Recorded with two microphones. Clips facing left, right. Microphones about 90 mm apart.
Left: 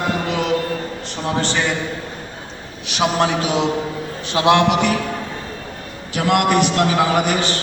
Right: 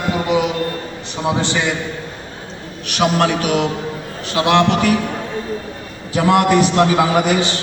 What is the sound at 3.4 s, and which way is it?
A man's voice, 25° left (ahead or behind).